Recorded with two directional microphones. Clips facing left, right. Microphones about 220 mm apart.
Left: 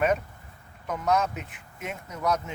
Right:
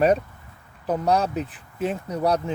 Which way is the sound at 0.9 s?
35° right (ahead or behind).